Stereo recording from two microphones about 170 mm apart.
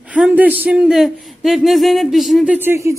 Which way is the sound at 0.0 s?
5° right (ahead or behind).